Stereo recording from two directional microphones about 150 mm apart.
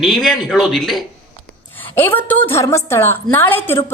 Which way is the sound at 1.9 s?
15° left (ahead or behind).